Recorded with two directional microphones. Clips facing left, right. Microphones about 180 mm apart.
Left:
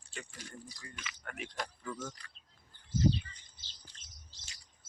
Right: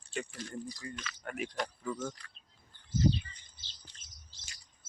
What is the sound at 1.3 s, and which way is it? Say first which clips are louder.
Speech: right 5 dB; centre (ahead or behind).